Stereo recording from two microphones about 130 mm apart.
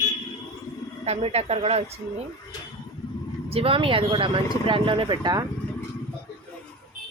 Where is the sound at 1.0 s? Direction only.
55° right (ahead or behind).